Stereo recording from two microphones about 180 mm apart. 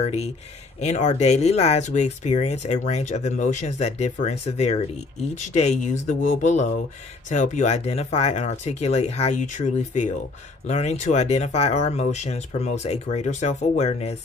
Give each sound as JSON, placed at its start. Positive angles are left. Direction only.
{"t": 0.0, "sound": "speech", "side_deg": 35}